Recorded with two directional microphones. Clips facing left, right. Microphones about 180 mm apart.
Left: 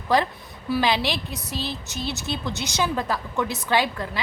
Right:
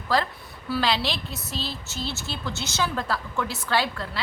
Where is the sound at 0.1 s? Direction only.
20° left (ahead or behind).